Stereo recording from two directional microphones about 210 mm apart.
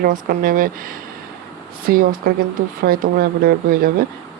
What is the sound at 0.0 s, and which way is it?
Speech, 45° right (ahead or behind).